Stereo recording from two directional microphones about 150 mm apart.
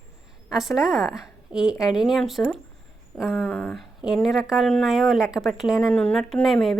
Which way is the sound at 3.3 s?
15° left (ahead or behind).